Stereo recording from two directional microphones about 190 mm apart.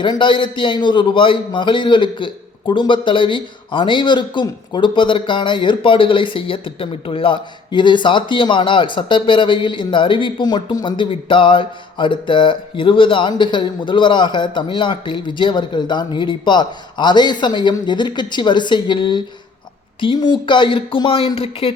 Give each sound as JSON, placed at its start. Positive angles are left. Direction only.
{"t": 0.0, "sound": "a man's voice", "side_deg": 25}